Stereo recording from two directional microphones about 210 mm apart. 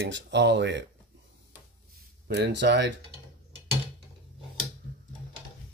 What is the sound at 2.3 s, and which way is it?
Speech, 55° right (ahead or behind).